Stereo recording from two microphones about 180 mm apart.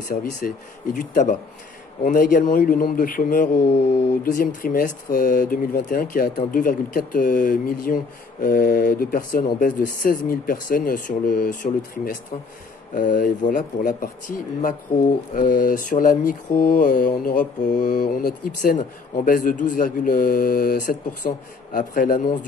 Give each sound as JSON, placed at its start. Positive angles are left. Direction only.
{"t": 0.1, "sound": "speech", "side_deg": 50}